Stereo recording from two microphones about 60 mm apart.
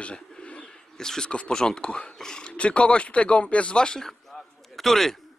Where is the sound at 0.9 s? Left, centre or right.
Centre.